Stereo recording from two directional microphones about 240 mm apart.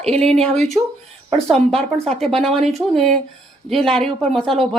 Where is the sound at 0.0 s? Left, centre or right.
Centre.